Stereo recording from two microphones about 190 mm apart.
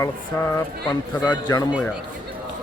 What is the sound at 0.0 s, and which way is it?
Speech, 15° left (ahead or behind).